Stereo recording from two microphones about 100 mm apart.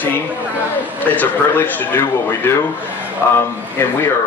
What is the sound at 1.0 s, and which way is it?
A man's voice, 15° left (ahead or behind).